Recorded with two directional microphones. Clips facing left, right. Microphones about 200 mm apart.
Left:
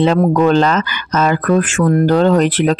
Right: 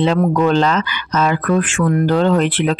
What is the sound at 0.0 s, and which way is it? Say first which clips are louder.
Speech: left 3 dB; 45° left (ahead or behind).